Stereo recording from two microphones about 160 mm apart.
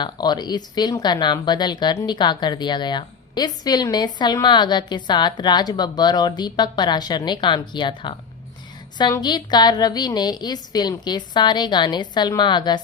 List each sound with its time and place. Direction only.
0.0 s speech: 25° left (ahead or behind)